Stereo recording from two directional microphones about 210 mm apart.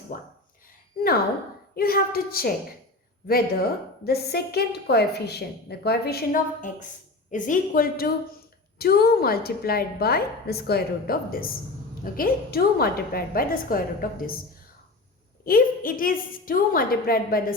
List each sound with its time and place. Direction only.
0.1 s a woman's voice: 40° left (ahead or behind)
1.7 s a woman's voice: 45° left (ahead or behind)
15.4 s a woman's voice: 45° left (ahead or behind)